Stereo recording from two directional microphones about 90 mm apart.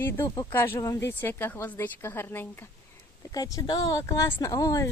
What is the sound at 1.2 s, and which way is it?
A woman's voice, 20° left (ahead or behind).